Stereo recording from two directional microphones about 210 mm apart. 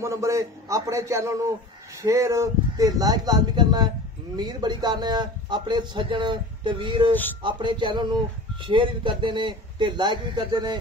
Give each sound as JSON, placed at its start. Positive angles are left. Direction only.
{"t": 0.0, "sound": "a man's voice", "side_deg": -15}